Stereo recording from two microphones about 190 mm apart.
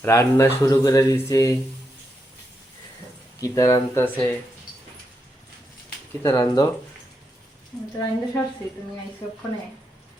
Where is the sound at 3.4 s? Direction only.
20° left (ahead or behind).